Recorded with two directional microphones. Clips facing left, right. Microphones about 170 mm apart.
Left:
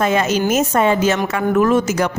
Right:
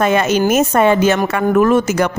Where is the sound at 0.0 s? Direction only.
65° right (ahead or behind).